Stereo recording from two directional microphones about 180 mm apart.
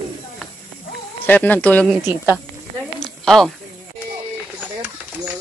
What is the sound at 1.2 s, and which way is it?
Speech, 10° left (ahead or behind).